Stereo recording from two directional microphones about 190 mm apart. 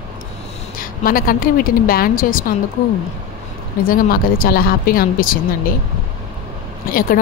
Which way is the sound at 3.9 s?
50° left (ahead or behind).